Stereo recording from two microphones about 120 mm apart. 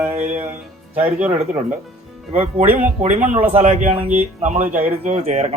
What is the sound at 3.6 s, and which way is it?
Speech, 70° right (ahead or behind).